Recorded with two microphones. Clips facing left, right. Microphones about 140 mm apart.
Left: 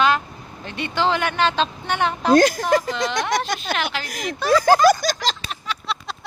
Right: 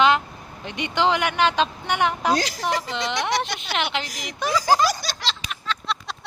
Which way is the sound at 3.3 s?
50° left (ahead or behind).